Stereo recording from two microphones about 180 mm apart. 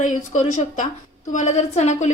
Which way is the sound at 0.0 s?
45° left (ahead or behind).